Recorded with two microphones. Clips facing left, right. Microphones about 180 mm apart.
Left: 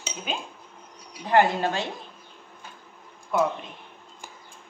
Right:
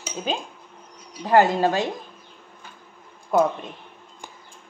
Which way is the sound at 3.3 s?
40° right (ahead or behind).